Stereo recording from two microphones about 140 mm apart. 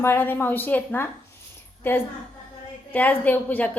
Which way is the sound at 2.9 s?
10° left (ahead or behind).